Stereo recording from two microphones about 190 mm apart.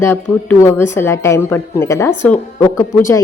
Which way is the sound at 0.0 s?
10° left (ahead or behind).